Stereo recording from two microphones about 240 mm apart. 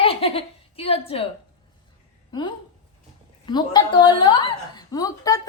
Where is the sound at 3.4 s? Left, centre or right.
Centre.